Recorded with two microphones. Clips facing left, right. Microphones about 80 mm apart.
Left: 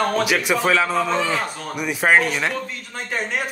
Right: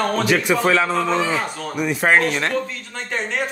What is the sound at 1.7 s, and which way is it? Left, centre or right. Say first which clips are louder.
Speech: even; centre.